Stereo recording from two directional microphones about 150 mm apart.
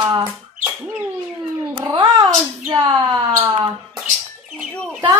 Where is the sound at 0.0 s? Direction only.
30° right (ahead or behind).